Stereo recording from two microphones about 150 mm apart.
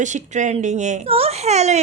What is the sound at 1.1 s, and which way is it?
Speech, 40° right (ahead or behind).